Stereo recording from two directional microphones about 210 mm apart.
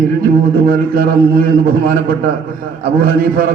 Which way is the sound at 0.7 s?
40° right (ahead or behind).